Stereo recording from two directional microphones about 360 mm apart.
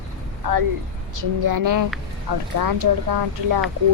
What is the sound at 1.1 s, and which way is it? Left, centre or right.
Speech, right.